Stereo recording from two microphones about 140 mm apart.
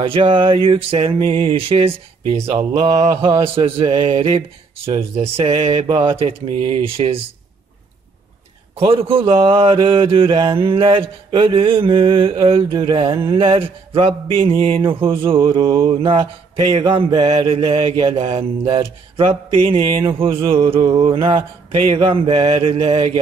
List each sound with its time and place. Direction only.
0.0 s speech: 40° right (ahead or behind)
8.7 s speech: 40° right (ahead or behind)